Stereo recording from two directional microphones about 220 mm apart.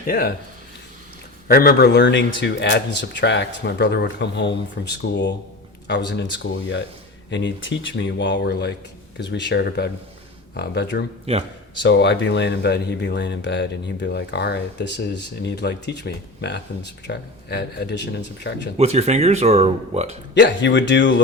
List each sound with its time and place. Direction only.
0.1 s speech: 45° left (ahead or behind)
1.5 s speech: 45° left (ahead or behind)
6.4 s speech: 55° left (ahead or behind)
11.3 s speech: 25° right (ahead or behind)
11.8 s speech: 55° left (ahead or behind)
18.8 s speech: 30° right (ahead or behind)
20.3 s speech: 55° left (ahead or behind)